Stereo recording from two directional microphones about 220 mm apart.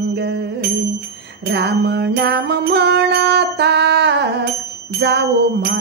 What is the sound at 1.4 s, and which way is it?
Music, 50° right (ahead or behind).